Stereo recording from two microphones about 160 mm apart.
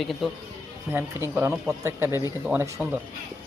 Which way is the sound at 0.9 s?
15° right (ahead or behind).